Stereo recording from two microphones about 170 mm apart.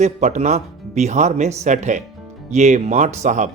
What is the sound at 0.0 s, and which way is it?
Speech, 45° right (ahead or behind).